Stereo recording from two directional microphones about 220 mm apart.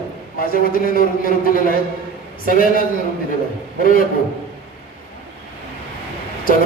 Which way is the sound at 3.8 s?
40° left (ahead or behind).